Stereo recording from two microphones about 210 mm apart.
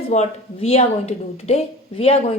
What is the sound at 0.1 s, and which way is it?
Speech, 30° left (ahead or behind).